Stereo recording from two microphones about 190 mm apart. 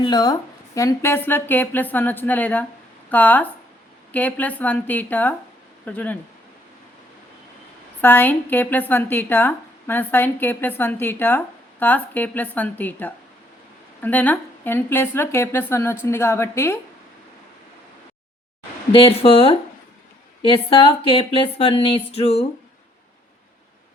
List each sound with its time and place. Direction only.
0.0 s a woman's voice: 20° left (ahead or behind)
8.0 s a woman's voice: 10° left (ahead or behind)
18.9 s speech: 30° left (ahead or behind)